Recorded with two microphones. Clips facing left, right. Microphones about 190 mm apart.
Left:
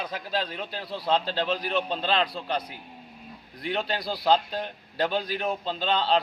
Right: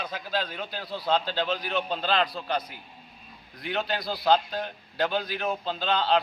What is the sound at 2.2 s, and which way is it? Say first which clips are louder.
Speech: even; 30° left (ahead or behind).